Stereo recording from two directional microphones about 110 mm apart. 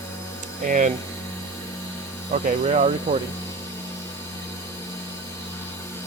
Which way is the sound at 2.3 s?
90° right.